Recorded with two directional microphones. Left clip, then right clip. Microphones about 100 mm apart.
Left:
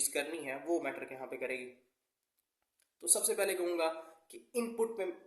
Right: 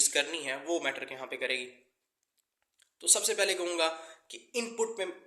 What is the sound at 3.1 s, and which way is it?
Speech, 35° left (ahead or behind).